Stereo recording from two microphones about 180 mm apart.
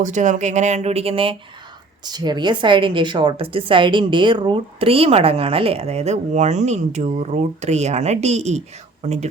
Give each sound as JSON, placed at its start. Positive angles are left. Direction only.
{"t": 0.0, "sound": "a woman's voice", "side_deg": -45}